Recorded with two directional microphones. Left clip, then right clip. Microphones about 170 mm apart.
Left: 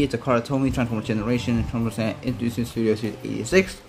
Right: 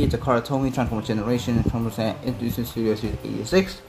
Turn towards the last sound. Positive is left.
turn(degrees=20)  # may be behind; listen again after turning